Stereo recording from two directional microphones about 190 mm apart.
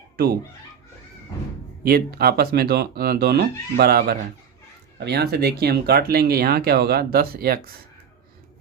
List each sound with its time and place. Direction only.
1.8 s speech: 55° right (ahead or behind)